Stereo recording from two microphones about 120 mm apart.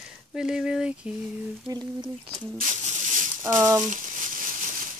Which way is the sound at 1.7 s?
35° right (ahead or behind).